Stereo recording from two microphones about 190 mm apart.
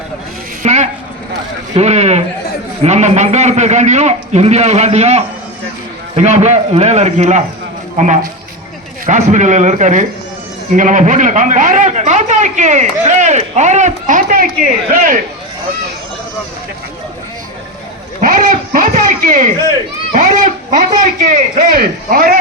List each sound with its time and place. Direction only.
0.6 s a sound: 35° right (ahead or behind)
1.7 s a man's voice: 35° right (ahead or behind)
18.2 s a man's voice: 45° right (ahead or behind)